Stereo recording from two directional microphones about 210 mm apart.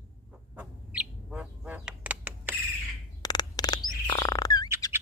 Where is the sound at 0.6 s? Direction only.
5° right (ahead or behind).